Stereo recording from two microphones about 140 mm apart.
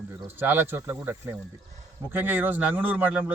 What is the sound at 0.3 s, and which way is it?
Speech, 15° right (ahead or behind).